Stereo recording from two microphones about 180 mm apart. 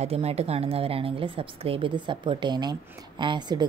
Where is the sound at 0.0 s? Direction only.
35° right (ahead or behind).